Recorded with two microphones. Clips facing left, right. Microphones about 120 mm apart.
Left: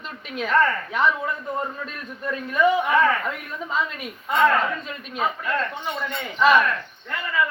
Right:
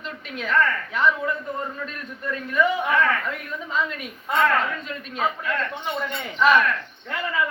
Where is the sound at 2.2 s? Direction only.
20° left (ahead or behind).